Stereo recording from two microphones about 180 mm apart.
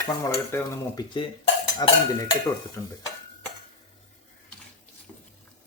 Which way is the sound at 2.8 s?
15° left (ahead or behind).